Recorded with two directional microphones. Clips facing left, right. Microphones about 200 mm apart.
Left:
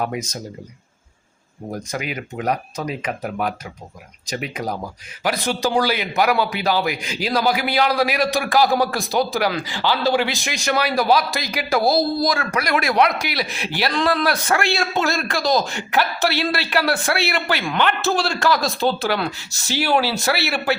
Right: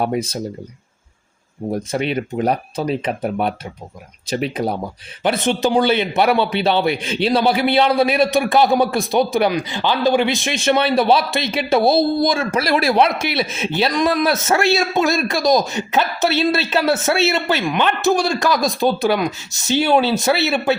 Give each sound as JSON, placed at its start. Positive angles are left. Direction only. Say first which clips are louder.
{"t": 0.0, "sound": "speech", "louder": "right 5 dB", "side_deg": -30}
{"t": 1.7, "sound": "a man's voice", "louder": "right 7 dB", "side_deg": -30}